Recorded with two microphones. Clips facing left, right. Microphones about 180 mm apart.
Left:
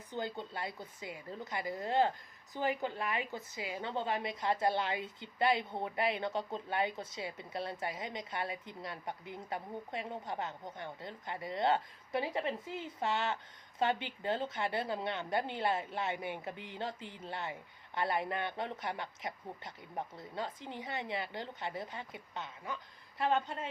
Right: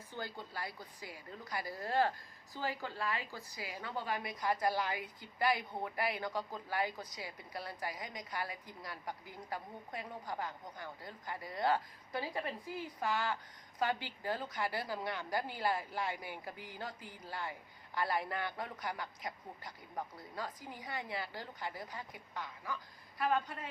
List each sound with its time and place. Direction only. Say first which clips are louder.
0.1 s a woman's voice: left 5 dB; 20° left (ahead or behind)